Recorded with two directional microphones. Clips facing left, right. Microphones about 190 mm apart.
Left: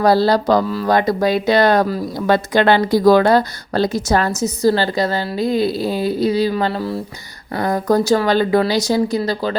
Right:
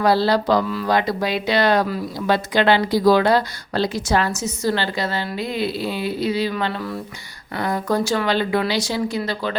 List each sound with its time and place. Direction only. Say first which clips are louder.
0.0 s speech: left 4 dB; 40° left (ahead or behind)